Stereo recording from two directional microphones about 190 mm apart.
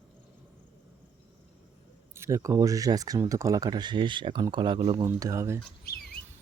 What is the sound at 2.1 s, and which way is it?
Speech, 15° right (ahead or behind).